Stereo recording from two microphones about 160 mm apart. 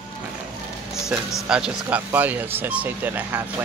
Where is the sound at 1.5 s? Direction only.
5° right (ahead or behind).